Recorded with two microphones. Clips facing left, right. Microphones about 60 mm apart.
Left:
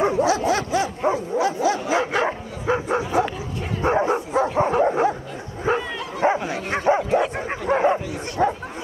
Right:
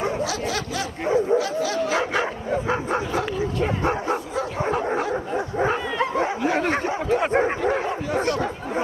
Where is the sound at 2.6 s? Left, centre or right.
Centre.